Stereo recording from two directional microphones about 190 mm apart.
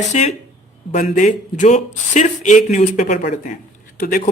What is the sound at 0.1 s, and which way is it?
Speech, 40° left (ahead or behind).